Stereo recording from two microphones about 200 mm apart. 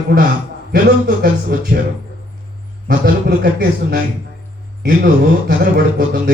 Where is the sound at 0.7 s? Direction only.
50° right (ahead or behind).